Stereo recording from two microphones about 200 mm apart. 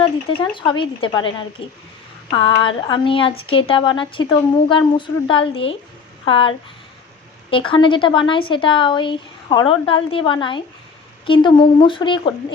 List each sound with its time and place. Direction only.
0.3 s speech: 25° left (ahead or behind)
2.3 s speech: 25° left (ahead or behind)
7.5 s speech: 25° left (ahead or behind)